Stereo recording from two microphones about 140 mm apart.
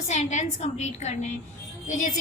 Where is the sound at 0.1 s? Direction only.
55° left (ahead or behind).